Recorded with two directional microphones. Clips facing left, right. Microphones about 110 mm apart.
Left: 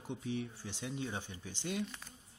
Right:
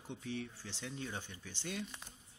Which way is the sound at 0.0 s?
15° left (ahead or behind).